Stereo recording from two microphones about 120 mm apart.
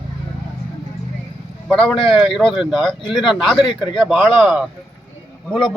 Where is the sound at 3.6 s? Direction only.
45° left (ahead or behind).